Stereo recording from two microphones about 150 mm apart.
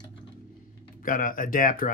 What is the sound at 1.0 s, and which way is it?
Speech, 65° left (ahead or behind).